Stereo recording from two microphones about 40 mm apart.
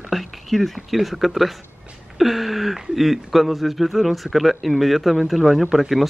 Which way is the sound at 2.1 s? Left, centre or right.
Centre.